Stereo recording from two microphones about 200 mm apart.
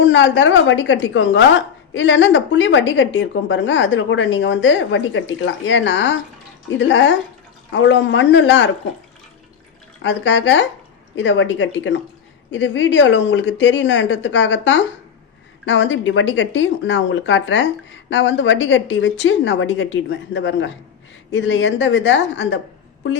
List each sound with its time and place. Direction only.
0.0 s speech: 70° left (ahead or behind)
10.0 s speech: 65° left (ahead or behind)